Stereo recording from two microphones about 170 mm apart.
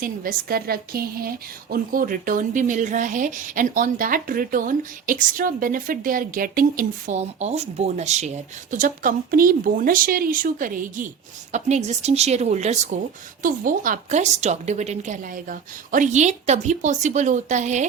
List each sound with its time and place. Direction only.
0.0 s a woman's voice: 55° right (ahead or behind)
11.5 s speech: 40° right (ahead or behind)
13.4 s speech: 50° right (ahead or behind)